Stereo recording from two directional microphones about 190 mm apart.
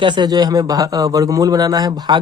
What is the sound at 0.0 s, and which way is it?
A man's voice, 25° right (ahead or behind).